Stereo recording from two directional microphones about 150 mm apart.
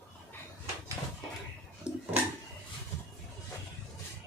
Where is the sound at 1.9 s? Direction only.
5° right (ahead or behind).